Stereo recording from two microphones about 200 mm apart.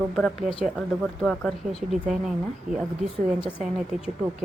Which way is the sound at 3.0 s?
35° right (ahead or behind).